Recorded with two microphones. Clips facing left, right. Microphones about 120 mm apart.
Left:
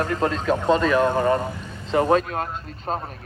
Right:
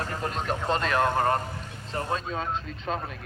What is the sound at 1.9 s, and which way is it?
Speech, 90° left.